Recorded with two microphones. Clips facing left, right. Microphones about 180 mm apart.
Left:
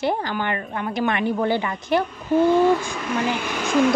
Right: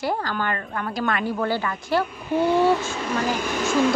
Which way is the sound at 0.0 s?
20° left (ahead or behind).